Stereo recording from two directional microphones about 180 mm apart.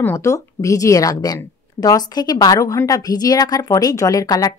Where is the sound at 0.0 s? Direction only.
15° left (ahead or behind).